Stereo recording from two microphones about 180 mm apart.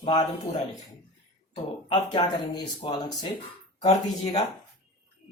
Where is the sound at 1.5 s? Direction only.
30° left (ahead or behind).